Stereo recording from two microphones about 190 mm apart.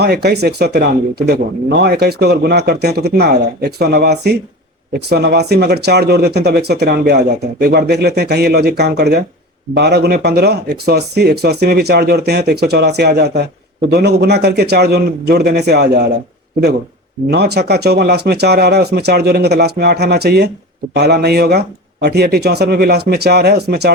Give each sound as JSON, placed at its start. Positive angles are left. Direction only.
{"t": 0.0, "sound": "speech", "side_deg": -60}
{"t": 17.3, "sound": "speech", "side_deg": -60}